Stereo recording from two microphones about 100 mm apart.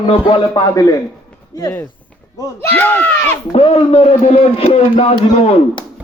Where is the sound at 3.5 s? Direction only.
85° left.